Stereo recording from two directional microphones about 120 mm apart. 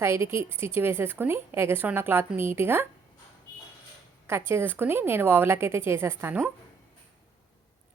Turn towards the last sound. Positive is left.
turn(degrees=-15)  # may be behind; listen again after turning